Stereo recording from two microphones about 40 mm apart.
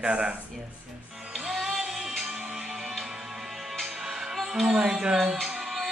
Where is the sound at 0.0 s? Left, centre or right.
Right.